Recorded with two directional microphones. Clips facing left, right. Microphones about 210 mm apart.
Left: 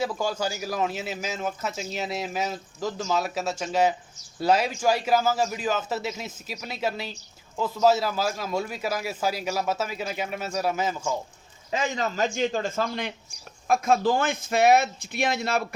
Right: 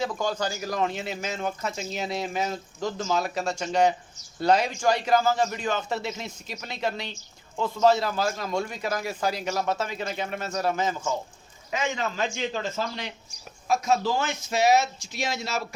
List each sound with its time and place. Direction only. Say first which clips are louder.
0.0 s a man's voice: left 1 dB; 10° left (ahead or behind)
11.7 s a man's voice: left 1 dB; 35° left (ahead or behind); by 15.6 s 55° left (ahead or behind)